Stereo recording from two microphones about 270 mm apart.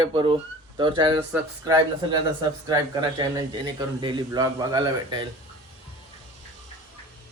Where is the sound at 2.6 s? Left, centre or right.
Centre.